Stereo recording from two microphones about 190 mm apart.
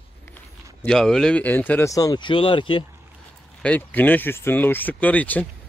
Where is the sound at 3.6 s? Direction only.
10° left (ahead or behind).